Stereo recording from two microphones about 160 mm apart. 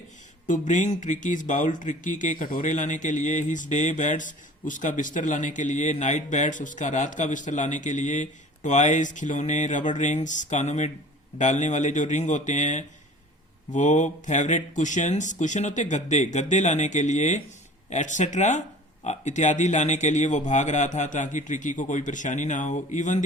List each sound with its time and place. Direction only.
0.4 s speech: 50° left (ahead or behind)